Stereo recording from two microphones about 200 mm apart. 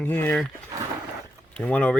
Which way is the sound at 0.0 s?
10° left (ahead or behind).